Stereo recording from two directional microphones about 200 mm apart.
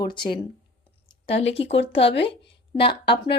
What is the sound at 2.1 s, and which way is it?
Speech, 60° left (ahead or behind).